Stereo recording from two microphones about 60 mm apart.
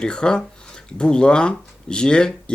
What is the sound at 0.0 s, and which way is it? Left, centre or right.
Speech, centre.